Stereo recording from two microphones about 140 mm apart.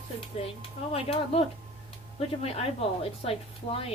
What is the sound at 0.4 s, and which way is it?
Speech, 45° left (ahead or behind).